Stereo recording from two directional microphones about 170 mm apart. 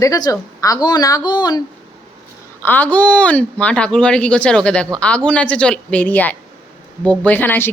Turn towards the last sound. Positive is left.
turn(degrees=10)  # may be behind; listen again after turning